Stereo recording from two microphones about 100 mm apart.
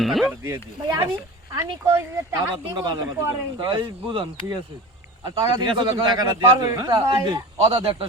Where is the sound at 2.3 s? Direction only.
50° right (ahead or behind).